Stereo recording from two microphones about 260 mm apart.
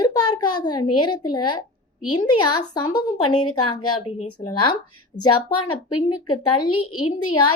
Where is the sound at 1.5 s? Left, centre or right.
Left.